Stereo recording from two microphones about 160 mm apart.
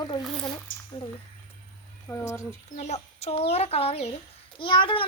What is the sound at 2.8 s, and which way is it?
A woman's voice, 45° left (ahead or behind).